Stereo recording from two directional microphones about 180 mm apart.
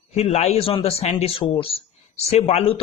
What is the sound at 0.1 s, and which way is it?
A man's voice, 35° left (ahead or behind).